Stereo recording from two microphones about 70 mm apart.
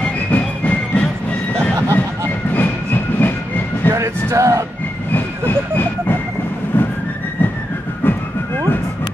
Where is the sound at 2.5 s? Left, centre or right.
Left.